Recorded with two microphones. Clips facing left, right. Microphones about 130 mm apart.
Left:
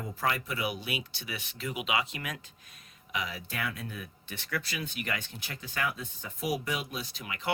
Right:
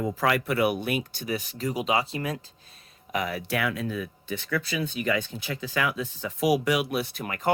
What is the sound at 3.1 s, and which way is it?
Speech, 55° right (ahead or behind).